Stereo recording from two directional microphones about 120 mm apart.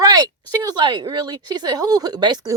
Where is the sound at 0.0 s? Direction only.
35° right (ahead or behind).